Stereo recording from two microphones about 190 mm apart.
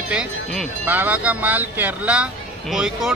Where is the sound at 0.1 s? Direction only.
Centre (ahead or behind).